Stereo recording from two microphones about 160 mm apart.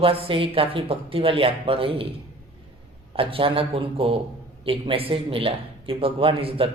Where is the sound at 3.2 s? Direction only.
35° right (ahead or behind).